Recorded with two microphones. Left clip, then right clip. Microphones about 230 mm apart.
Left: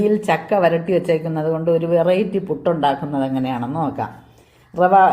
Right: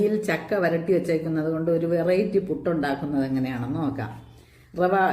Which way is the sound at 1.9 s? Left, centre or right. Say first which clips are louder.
Left 5 dB; left.